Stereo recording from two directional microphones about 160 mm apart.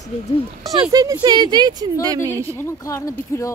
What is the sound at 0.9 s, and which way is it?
Speech, 25° right (ahead or behind).